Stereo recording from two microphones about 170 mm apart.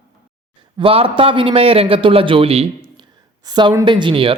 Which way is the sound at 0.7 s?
35° right (ahead or behind).